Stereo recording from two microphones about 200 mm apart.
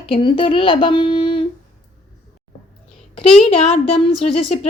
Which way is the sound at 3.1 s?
30° left (ahead or behind).